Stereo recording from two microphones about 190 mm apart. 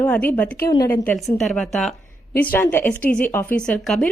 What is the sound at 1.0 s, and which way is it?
A woman's voice, centre (ahead or behind).